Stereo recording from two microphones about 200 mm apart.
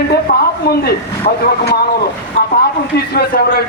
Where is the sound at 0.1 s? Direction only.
50° left (ahead or behind).